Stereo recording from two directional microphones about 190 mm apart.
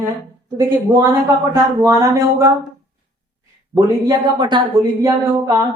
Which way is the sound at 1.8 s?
15° right (ahead or behind).